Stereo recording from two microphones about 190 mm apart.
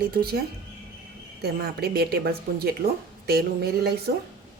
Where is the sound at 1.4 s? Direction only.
55° right (ahead or behind).